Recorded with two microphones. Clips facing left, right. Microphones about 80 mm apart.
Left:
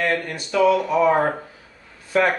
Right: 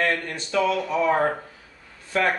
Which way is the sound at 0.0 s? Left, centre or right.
Centre.